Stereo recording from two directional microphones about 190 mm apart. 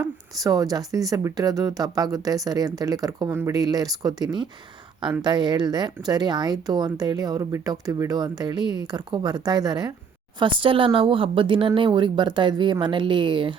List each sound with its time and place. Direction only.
0.4 s speech: 20° right (ahead or behind)